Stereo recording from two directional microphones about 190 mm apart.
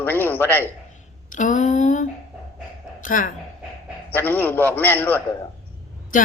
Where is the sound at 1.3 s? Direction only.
40° left (ahead or behind).